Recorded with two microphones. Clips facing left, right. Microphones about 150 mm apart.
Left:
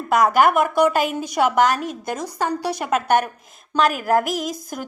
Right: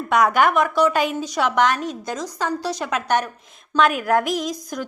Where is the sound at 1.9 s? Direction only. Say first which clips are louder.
Left 1 dB; 55° left (ahead or behind).